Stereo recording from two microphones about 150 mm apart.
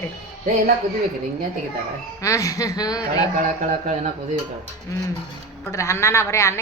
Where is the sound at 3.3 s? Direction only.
55° right (ahead or behind).